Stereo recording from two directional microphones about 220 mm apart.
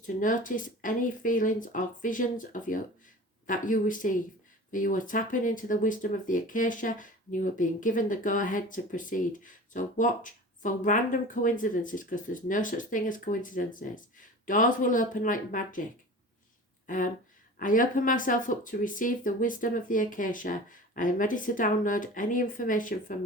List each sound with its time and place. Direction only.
0.2 s speech: 35° left (ahead or behind)
16.8 s speech: 40° left (ahead or behind)